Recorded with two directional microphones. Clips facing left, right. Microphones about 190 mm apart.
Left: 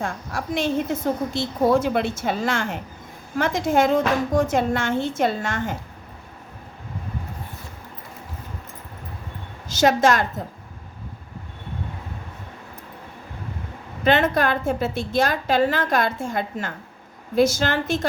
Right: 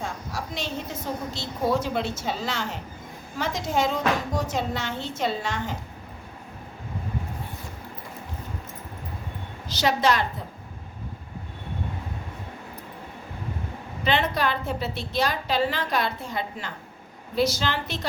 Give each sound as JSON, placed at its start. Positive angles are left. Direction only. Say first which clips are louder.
{"t": 0.0, "sound": "a woman's voice", "louder": "left 4 dB", "side_deg": 50}
{"t": 9.6, "sound": "a woman's voice", "louder": "left 5 dB", "side_deg": 45}
{"t": 14.0, "sound": "a woman's voice", "louder": "left 5 dB", "side_deg": 50}